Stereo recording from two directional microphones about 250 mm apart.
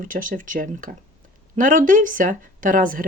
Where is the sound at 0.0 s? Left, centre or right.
Right.